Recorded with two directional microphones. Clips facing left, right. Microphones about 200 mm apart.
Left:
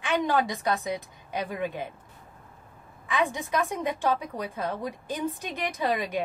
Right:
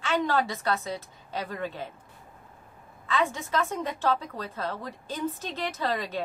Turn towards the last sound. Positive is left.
turn(degrees=15)  # may be behind; listen again after turning